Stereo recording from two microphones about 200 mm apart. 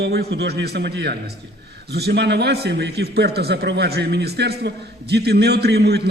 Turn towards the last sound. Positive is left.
turn(degrees=-55)  # may be behind; listen again after turning